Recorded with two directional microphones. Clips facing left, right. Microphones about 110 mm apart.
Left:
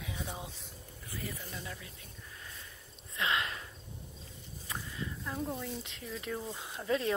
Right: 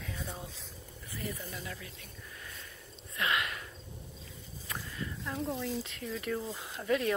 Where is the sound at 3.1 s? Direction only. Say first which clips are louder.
Right 1 dB; 25° left (ahead or behind).